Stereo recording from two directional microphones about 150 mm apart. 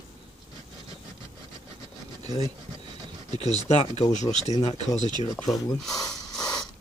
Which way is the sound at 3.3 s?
45° left (ahead or behind).